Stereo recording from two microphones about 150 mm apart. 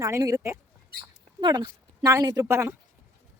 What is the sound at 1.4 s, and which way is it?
A woman's voice, 30° right (ahead or behind).